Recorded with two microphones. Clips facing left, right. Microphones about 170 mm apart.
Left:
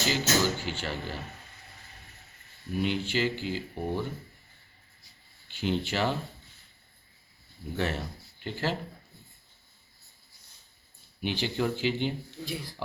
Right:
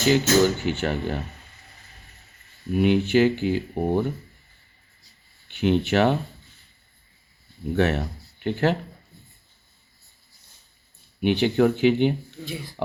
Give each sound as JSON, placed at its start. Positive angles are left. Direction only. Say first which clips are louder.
{"t": 0.0, "sound": "speech", "louder": "right 9 dB", "side_deg": -55}
{"t": 2.7, "sound": "speech", "louder": "right 10 dB", "side_deg": -60}
{"t": 5.5, "sound": "speech", "louder": "right 9 dB", "side_deg": -65}
{"t": 7.8, "sound": "speech", "louder": "right 9 dB", "side_deg": -65}
{"t": 11.2, "sound": "speech", "louder": "right 10 dB", "side_deg": -60}